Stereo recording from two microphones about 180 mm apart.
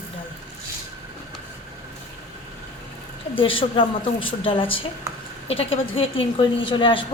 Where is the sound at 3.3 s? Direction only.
30° left (ahead or behind).